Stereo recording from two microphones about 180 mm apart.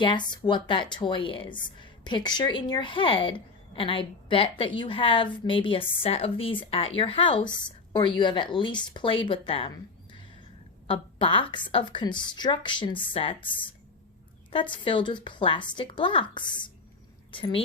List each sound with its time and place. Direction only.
0.0 s a woman's voice: 25° left (ahead or behind)